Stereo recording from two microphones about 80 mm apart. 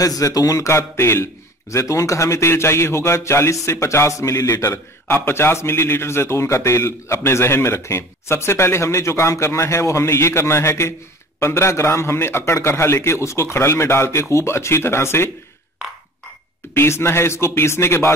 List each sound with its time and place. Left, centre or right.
0.0 s speech: left
5.0 s speech: left
16.7 s speech: left